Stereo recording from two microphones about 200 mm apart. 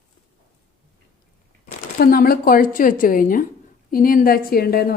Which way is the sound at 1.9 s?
50° left (ahead or behind).